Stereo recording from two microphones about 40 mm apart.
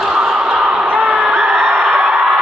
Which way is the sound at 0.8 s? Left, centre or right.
Right.